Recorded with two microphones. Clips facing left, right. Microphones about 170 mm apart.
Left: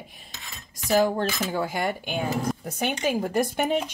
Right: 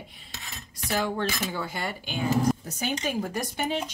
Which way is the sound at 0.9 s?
45° left (ahead or behind).